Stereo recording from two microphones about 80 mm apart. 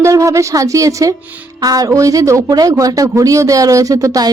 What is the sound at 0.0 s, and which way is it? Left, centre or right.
Speech, right.